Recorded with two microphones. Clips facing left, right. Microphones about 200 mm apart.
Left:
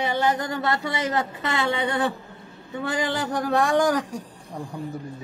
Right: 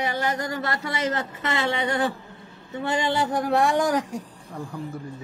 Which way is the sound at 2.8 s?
90° left.